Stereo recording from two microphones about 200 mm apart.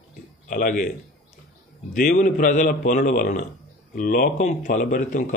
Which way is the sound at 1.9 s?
40° left (ahead or behind).